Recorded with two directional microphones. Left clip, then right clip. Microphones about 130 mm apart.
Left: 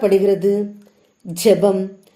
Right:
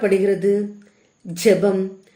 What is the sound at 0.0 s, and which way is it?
A woman's voice, 25° left (ahead or behind).